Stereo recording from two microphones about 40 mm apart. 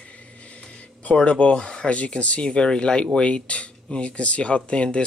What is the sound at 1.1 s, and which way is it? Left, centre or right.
Speech, left.